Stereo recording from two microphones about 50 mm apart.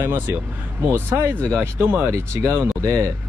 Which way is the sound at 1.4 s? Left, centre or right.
Right.